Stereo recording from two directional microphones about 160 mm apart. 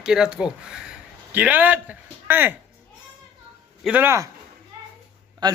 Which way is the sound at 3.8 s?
10° right (ahead or behind).